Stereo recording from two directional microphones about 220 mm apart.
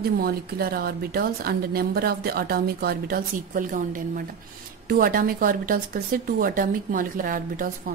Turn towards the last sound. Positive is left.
turn(degrees=-40)  # may be behind; listen again after turning